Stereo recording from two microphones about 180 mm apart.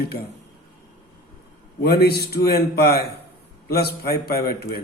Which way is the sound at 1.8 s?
60° left (ahead or behind).